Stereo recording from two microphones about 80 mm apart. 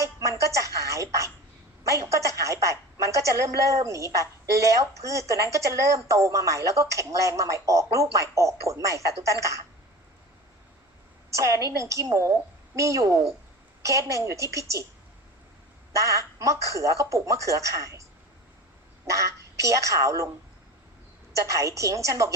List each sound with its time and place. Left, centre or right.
0.0 s a sound: right
1.8 s a woman's voice: right
11.3 s a woman's voice: right
16.0 s a woman's voice: right
19.6 s a woman's voice: right
21.8 s a woman's voice: right